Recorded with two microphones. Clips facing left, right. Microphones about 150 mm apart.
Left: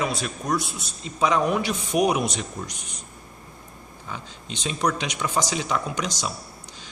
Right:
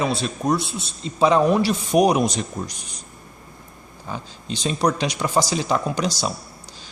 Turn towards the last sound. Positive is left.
turn(degrees=-35)  # may be behind; listen again after turning